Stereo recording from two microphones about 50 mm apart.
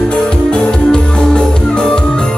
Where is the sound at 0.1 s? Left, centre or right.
Centre.